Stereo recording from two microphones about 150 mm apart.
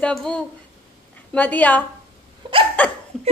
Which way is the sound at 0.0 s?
5° left (ahead or behind).